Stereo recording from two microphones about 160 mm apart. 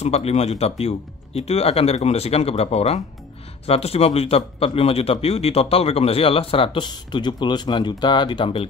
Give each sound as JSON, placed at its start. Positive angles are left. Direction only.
{"t": 0.0, "sound": "a man's voice", "side_deg": 40}